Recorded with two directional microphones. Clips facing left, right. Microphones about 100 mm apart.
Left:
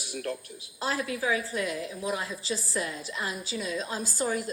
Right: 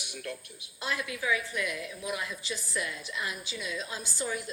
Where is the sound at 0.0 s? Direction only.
35° left (ahead or behind).